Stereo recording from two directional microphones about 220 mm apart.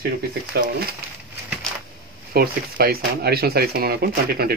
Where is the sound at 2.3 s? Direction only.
45° right (ahead or behind).